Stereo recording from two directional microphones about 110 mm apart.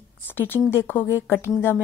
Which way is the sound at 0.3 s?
20° left (ahead or behind).